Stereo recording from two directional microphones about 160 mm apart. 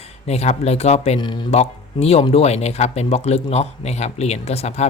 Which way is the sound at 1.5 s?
40° left (ahead or behind).